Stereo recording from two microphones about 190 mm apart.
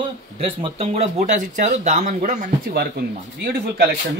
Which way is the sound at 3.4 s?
60° right (ahead or behind).